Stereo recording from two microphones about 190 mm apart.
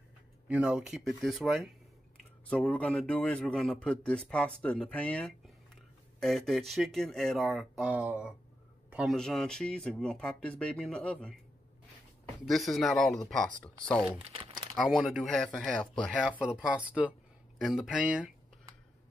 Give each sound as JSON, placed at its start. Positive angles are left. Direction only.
{"t": 0.5, "sound": "speech", "side_deg": -5}
{"t": 12.4, "sound": "speech", "side_deg": 0}
{"t": 14.1, "sound": "crumpling", "side_deg": -25}
{"t": 14.8, "sound": "speech", "side_deg": 0}